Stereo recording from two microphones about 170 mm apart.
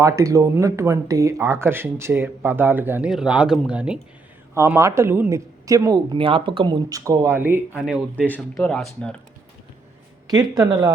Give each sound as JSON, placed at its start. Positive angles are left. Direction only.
{"t": 0.0, "sound": "speech", "side_deg": -20}
{"t": 6.1, "sound": "speech", "side_deg": -30}
{"t": 8.3, "sound": "speech", "side_deg": 5}
{"t": 10.2, "sound": "speech", "side_deg": -20}